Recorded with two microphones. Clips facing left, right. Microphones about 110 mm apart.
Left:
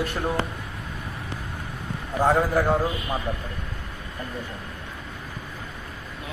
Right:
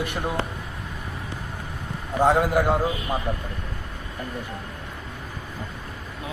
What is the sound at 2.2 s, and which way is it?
Speech, 15° right (ahead or behind).